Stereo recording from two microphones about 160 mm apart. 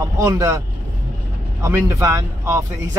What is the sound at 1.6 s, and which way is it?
Speech, 15° right (ahead or behind).